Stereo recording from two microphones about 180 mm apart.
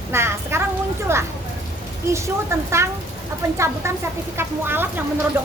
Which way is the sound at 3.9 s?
15° right (ahead or behind).